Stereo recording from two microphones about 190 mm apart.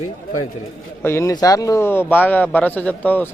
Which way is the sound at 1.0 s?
15° left (ahead or behind).